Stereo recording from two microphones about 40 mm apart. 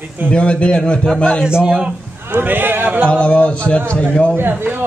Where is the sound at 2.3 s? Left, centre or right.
Right.